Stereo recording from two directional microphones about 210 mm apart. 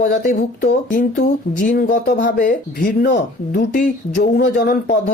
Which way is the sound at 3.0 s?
55° left (ahead or behind).